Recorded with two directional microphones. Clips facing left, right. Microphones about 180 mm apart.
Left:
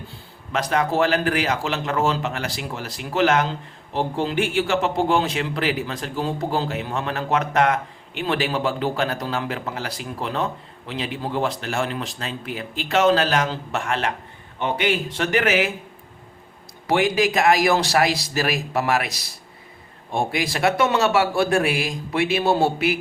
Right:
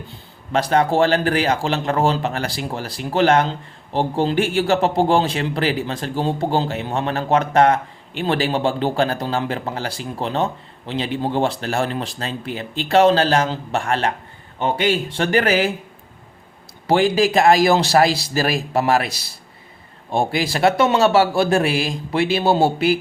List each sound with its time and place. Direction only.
0.5 s a man's voice: 30° right (ahead or behind)
16.8 s a man's voice: 30° right (ahead or behind)